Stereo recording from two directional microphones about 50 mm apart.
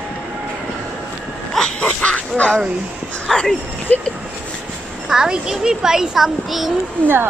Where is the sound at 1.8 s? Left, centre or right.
Left.